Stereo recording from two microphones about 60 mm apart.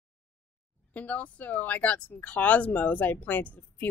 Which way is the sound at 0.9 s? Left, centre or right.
Left.